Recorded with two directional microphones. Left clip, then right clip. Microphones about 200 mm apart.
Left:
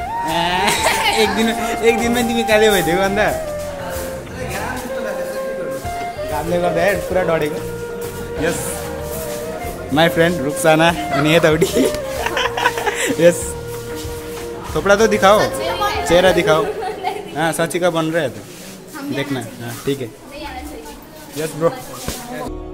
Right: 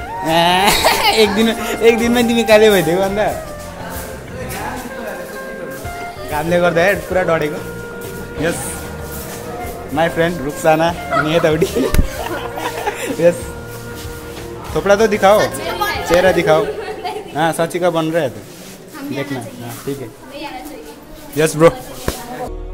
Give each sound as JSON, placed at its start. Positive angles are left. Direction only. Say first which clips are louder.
{"t": 0.3, "sound": "speech", "louder": "right 6 dB", "side_deg": -30}
{"t": 3.0, "sound": "speech", "louder": "even", "side_deg": 5}
{"t": 6.5, "sound": "a man's voice", "louder": "right 4 dB", "side_deg": -25}
{"t": 6.8, "sound": "speech", "louder": "right 2 dB", "side_deg": -5}
{"t": 9.9, "sound": "speech", "louder": "left 2 dB", "side_deg": 15}
{"t": 14.8, "sound": "speech", "louder": "right 1 dB", "side_deg": 0}
{"t": 21.4, "sound": "a man's voice", "louder": "right 8 dB", "side_deg": -35}